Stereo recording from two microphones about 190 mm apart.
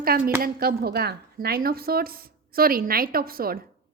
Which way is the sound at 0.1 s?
50° right (ahead or behind).